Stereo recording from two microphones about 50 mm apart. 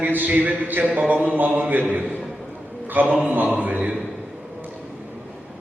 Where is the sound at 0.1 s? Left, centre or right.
Right.